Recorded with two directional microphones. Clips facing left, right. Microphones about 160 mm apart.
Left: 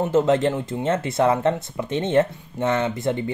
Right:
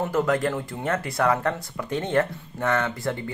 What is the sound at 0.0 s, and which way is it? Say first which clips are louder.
Speech: left 5 dB; 25° left (ahead or behind).